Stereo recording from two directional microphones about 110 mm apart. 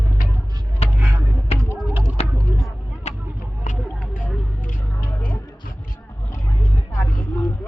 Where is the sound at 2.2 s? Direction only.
70° left (ahead or behind).